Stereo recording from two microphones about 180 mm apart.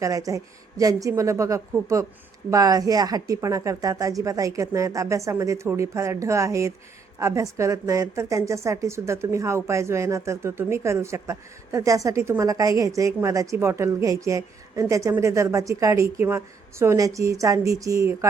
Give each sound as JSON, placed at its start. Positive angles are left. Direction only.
{"t": 0.0, "sound": "a woman's voice", "side_deg": -20}